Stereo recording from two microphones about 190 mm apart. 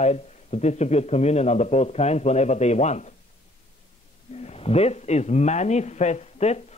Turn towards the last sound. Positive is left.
turn(degrees=35)  # may be behind; listen again after turning